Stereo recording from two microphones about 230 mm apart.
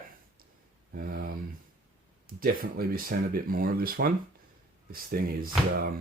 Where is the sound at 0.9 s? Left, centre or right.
Right.